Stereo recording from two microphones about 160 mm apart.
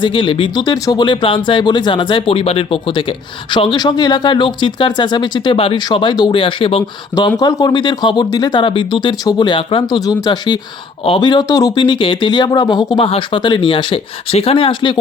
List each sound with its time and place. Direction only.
0.0 s speech: 30° left (ahead or behind)
7.3 s speech: 25° left (ahead or behind)